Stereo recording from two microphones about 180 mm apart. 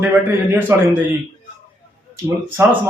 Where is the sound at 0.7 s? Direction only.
15° right (ahead or behind).